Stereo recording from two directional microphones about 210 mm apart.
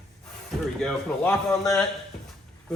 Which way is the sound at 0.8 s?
Centre (ahead or behind).